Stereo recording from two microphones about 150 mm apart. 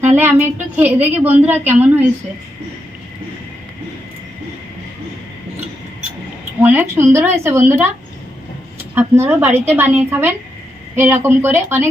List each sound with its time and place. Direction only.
0.0 s a woman's voice: 15° right (ahead or behind)
6.6 s a woman's voice: 15° right (ahead or behind)